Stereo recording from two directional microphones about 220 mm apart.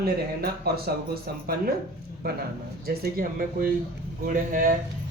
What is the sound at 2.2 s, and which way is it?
Speech, 45° right (ahead or behind).